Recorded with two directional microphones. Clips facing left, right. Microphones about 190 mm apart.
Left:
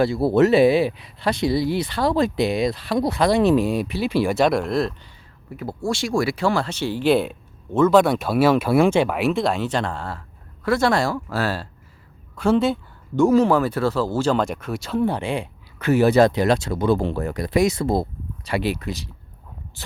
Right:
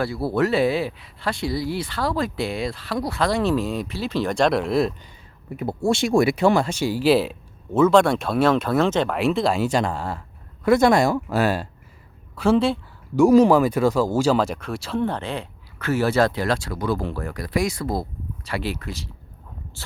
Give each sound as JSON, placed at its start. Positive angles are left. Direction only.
{"t": 0.0, "sound": "speech", "side_deg": 20}
{"t": 5.5, "sound": "speech", "side_deg": -20}
{"t": 12.4, "sound": "speech", "side_deg": 0}
{"t": 13.1, "sound": "speech", "side_deg": -15}